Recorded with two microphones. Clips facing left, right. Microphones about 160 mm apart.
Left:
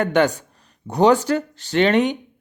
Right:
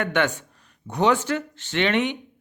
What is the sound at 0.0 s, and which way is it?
Speech, 35° left (ahead or behind).